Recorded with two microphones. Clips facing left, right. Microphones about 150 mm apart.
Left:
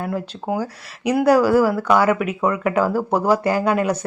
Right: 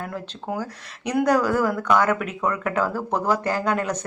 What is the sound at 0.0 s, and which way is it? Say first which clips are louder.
Speech: left 6 dB; 10° left (ahead or behind).